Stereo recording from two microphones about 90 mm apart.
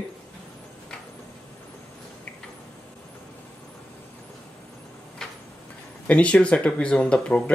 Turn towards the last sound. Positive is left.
turn(degrees=15)  # may be behind; listen again after turning